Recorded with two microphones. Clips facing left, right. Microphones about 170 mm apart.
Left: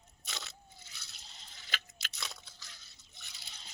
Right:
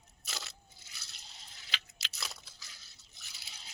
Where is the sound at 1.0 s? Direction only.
Centre (ahead or behind).